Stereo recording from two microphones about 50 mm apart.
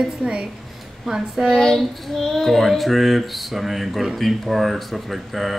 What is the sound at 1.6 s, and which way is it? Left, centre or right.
Speech, centre.